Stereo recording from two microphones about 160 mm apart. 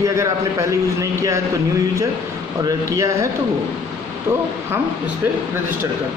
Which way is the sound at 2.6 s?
20° right (ahead or behind).